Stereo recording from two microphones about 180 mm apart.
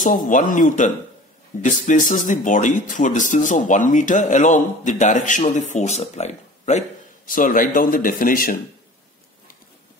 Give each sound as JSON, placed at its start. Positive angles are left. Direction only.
{"t": 0.0, "sound": "speech", "side_deg": 45}
{"t": 7.2, "sound": "speech", "side_deg": 50}